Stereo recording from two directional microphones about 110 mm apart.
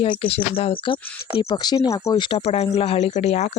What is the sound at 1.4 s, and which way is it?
Speech, 40° left (ahead or behind).